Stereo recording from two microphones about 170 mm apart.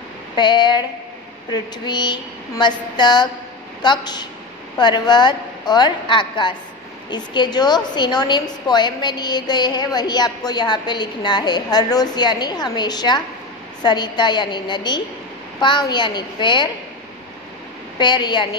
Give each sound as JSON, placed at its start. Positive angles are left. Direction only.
{"t": 0.4, "sound": "a woman's voice", "side_deg": 25}
{"t": 17.9, "sound": "a woman's voice", "side_deg": 25}